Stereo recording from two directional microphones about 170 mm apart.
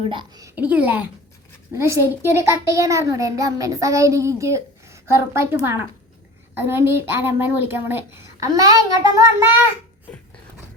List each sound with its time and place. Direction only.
0.0 s a child's voice: 30° right (ahead or behind)
0.5 s a child's voice: 10° right (ahead or behind)
6.6 s a child's voice: 15° right (ahead or behind)